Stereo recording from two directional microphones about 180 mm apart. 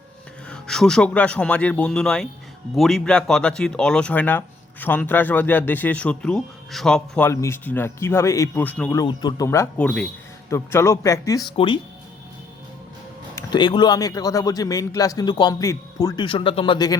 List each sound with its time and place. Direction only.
0.5 s speech: 5° left (ahead or behind)
9.0 s speech: 20° left (ahead or behind)
11.5 s speech: 30° left (ahead or behind)
13.3 s speech: 25° left (ahead or behind)